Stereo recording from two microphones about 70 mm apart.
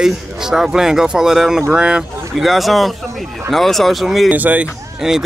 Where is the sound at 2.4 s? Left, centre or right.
Centre.